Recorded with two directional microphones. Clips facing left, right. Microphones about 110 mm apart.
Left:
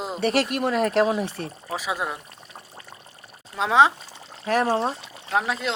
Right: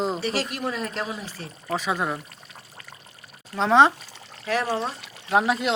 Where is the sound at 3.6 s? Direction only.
5° left (ahead or behind).